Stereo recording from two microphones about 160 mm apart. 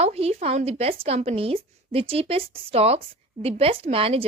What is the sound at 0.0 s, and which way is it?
A woman's voice, 40° right (ahead or behind).